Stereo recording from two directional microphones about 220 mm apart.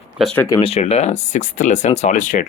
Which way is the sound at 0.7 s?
30° left (ahead or behind).